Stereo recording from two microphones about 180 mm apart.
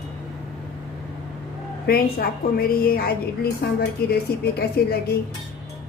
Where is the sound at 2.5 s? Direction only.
55° left (ahead or behind).